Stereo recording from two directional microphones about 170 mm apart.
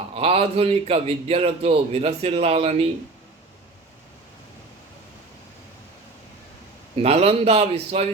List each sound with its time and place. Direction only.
0.1 s a man's voice: 35° right (ahead or behind)
6.9 s a man's voice: 35° right (ahead or behind)